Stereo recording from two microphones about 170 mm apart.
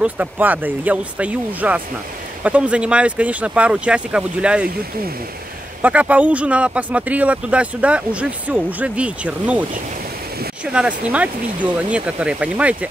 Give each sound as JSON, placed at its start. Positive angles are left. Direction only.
{"t": 0.0, "sound": "speech", "side_deg": -10}
{"t": 5.8, "sound": "speech", "side_deg": -10}